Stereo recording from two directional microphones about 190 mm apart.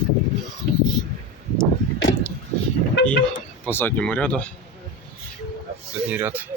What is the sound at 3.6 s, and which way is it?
Speech, 10° left (ahead or behind).